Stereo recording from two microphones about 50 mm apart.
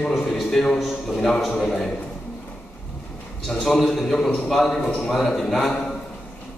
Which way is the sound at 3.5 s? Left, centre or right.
Centre.